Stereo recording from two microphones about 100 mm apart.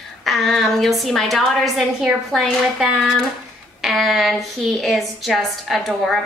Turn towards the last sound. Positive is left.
turn(degrees=0)  # may be behind; listen again after turning